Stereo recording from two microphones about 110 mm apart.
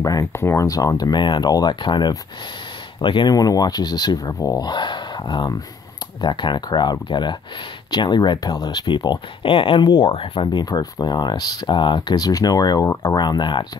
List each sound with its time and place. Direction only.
0.0 s speech: 30° left (ahead or behind)